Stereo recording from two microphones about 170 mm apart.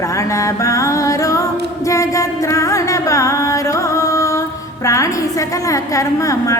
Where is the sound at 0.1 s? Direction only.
20° left (ahead or behind).